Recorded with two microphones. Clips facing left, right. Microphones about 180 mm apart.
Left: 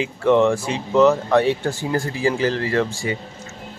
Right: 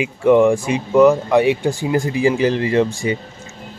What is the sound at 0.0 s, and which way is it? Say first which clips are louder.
Speech: right 4 dB; 10° right (ahead or behind).